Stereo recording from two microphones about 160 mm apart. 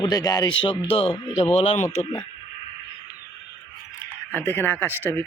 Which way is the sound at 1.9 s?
15° left (ahead or behind).